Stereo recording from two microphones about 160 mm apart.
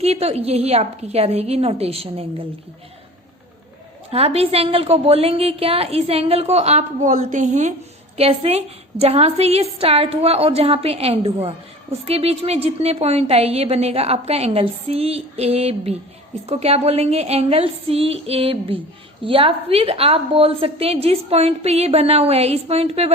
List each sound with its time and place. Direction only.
0.0 s a woman's voice: 40° right (ahead or behind)
4.1 s a woman's voice: 40° right (ahead or behind)